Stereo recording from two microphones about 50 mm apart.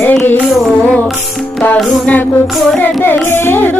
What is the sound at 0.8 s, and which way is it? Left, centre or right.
Carnatic music, left.